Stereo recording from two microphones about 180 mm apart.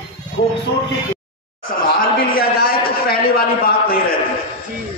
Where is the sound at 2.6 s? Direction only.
55° left (ahead or behind).